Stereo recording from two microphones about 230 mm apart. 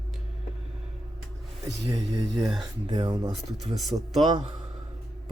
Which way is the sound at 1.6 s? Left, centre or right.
Centre.